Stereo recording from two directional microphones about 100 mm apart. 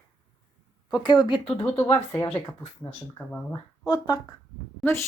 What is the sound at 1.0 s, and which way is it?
Speech, 45° left (ahead or behind).